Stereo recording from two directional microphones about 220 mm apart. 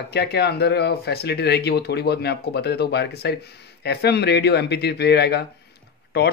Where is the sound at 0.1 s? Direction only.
50° left (ahead or behind).